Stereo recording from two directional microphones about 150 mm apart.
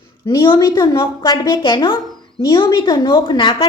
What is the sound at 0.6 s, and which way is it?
A woman's voice, 25° left (ahead or behind).